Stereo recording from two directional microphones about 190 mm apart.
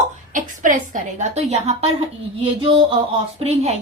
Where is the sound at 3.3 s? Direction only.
35° right (ahead or behind).